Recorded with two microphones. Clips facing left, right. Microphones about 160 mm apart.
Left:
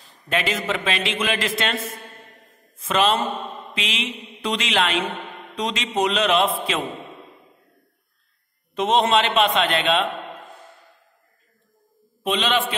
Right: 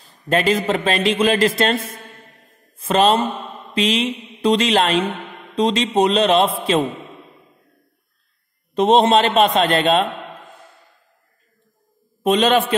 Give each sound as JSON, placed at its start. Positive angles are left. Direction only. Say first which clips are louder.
{"t": 0.0, "sound": "a man's voice", "louder": "right 6 dB", "side_deg": -40}
{"t": 2.8, "sound": "a man's voice", "louder": "right 5 dB", "side_deg": -35}
{"t": 8.7, "sound": "a man's voice", "louder": "right 5 dB", "side_deg": -35}
{"t": 12.2, "sound": "a man's voice", "louder": "right 7 dB", "side_deg": -40}